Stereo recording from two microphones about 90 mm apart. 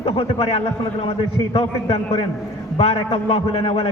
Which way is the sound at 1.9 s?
90° left.